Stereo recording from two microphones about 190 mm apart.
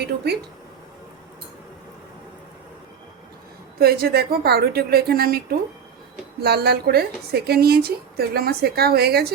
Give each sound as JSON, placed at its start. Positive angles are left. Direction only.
{"t": 3.8, "sound": "a woman's voice", "side_deg": -55}